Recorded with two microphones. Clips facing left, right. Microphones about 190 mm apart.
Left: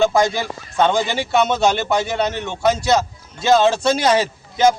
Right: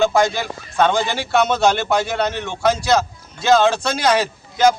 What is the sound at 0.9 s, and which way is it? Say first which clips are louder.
A man's voice: even; 20° left (ahead or behind).